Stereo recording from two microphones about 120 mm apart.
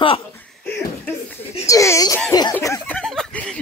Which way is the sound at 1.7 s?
25° left (ahead or behind).